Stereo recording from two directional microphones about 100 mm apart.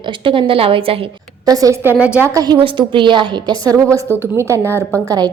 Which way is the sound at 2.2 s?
35° right (ahead or behind).